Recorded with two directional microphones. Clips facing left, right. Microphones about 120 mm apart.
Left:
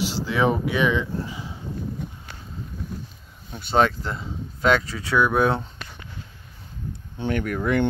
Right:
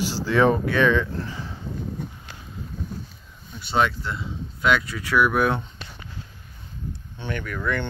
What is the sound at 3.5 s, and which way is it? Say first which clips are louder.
Speech: left 2 dB; 45° left (ahead or behind).